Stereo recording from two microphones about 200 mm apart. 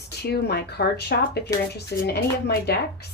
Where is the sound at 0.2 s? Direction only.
55° left (ahead or behind).